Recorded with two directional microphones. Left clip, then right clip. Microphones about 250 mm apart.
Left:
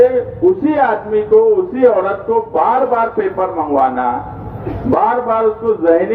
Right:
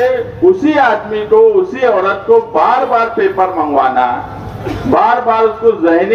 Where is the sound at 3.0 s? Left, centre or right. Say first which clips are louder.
Right 4 dB; right.